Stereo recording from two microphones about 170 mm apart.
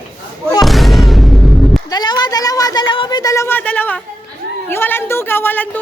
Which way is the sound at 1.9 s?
25° left (ahead or behind).